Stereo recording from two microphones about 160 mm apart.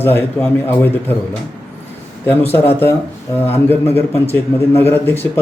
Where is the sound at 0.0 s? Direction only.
15° left (ahead or behind).